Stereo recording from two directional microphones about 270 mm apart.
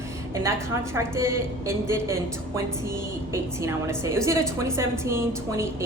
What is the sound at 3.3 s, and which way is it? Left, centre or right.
A woman's voice, centre.